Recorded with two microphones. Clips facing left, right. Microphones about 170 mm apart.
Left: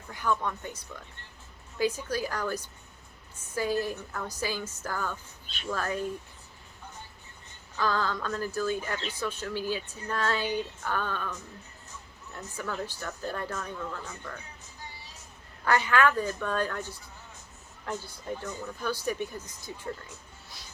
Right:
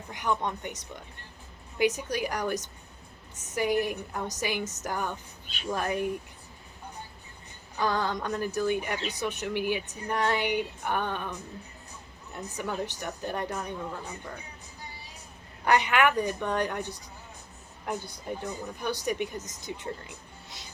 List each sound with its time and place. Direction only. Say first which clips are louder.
0.1 s speech: even; 20° right (ahead or behind)
2.0 s speech: right 1 dB; 15° right (ahead or behind)
7.8 s speech: right 1 dB; 20° right (ahead or behind)
13.7 s speech: right 1 dB; 25° right (ahead or behind)
15.6 s speech: right 1 dB; 20° right (ahead or behind)